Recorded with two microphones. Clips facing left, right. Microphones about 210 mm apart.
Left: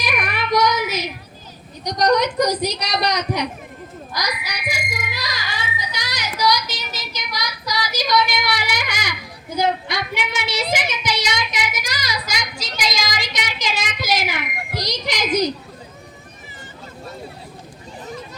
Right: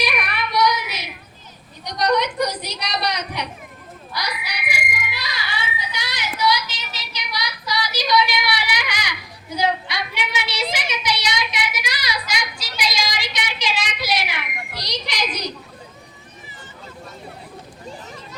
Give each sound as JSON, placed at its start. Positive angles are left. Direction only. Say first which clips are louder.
{"t": 0.0, "sound": "child singing", "louder": "even", "side_deg": 45}
{"t": 1.8, "sound": "a woman's voice", "louder": "left 3 dB", "side_deg": 45}
{"t": 4.1, "sound": "frog", "louder": "left 2 dB", "side_deg": 40}
{"t": 9.6, "sound": "child singing", "louder": "left 2 dB", "side_deg": 45}